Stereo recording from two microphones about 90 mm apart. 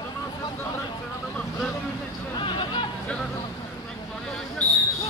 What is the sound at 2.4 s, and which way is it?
Hubbub, 65° left (ahead or behind).